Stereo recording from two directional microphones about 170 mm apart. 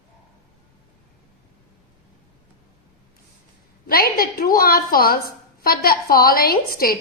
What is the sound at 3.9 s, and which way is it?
A woman's voice, 60° left (ahead or behind).